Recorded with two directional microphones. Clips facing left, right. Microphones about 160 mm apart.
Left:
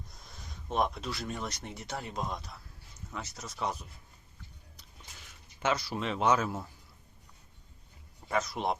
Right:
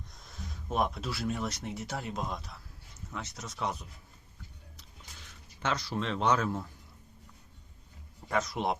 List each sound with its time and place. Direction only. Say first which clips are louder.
0.1 s speech: right 4 dB; centre (ahead or behind)
5.6 s speech: left 1 dB; 10° left (ahead or behind)
8.3 s speech: right 1 dB; centre (ahead or behind)